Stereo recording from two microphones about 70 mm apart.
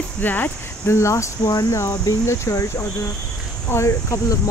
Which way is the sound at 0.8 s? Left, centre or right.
Left.